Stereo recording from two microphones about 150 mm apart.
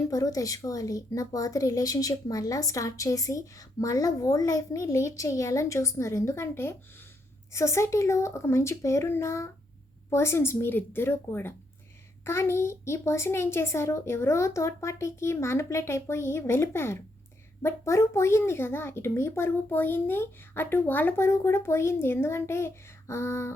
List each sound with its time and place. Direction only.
0.1 s a child's voice: 25° left (ahead or behind)